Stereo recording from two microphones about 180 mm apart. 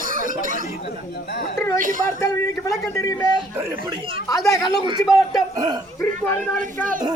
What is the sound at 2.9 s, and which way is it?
Speech, 20° left (ahead or behind).